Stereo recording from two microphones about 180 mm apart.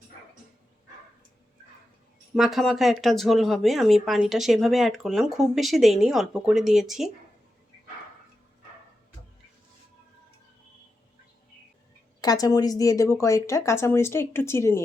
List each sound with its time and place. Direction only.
2.3 s speech: centre (ahead or behind)
12.2 s speech: 20° left (ahead or behind)